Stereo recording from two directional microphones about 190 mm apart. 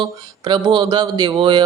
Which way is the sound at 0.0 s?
25° right (ahead or behind).